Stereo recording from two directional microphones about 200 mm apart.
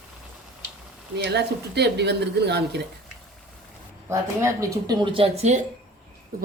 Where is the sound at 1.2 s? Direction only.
55° right (ahead or behind).